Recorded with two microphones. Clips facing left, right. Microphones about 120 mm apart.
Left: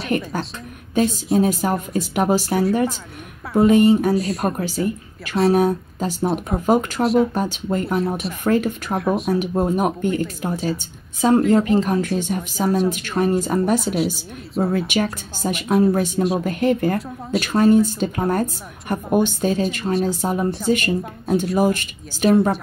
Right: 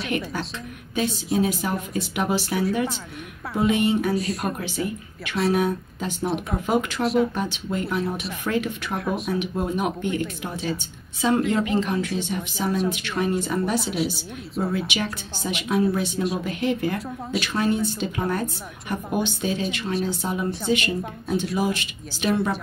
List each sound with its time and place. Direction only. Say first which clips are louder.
0.1 s a woman's voice: left 6 dB; 40° left (ahead or behind)
4.1 s speech: left 5 dB; centre (ahead or behind)
4.5 s a woman's voice: left 5 dB; 40° left (ahead or behind)
8.9 s speech: left 6 dB; centre (ahead or behind)
9.3 s a woman's voice: left 6 dB; 40° left (ahead or behind)
22.3 s a woman's voice: left 7 dB; 35° left (ahead or behind)